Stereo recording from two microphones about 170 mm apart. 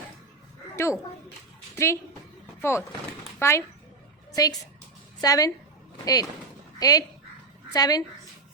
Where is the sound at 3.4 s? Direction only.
15° left (ahead or behind).